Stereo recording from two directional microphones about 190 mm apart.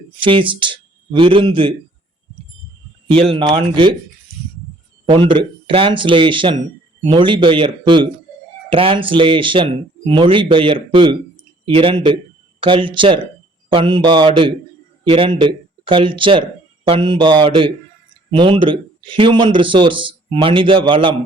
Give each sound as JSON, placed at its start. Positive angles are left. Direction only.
{"t": 0.1, "sound": "a man's voice", "side_deg": -25}
{"t": 3.1, "sound": "speech", "side_deg": -30}
{"t": 5.0, "sound": "speech", "side_deg": -25}